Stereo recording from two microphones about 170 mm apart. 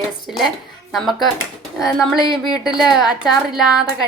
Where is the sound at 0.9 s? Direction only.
Centre (ahead or behind).